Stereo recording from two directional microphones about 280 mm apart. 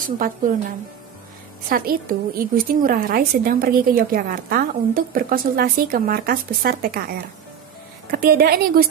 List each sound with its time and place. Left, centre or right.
0.2 s a woman's voice: right